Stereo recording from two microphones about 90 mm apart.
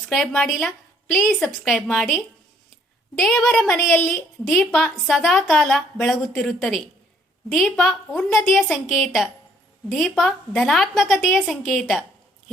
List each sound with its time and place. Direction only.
0.3 s a woman's voice: centre (ahead or behind)